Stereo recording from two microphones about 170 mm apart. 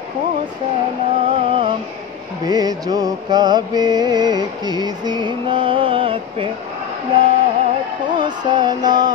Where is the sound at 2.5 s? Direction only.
25° right (ahead or behind).